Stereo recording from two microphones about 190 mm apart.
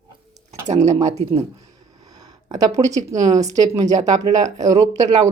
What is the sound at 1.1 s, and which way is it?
Speech, 35° right (ahead or behind).